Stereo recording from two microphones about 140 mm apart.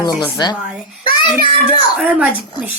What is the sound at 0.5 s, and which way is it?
A child's voice, 5° right (ahead or behind).